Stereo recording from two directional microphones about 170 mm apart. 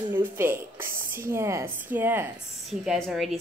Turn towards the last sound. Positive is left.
turn(degrees=0)  # may be behind; listen again after turning